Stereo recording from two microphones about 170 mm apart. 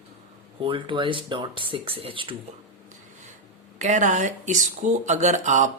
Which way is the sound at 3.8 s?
45° right (ahead or behind).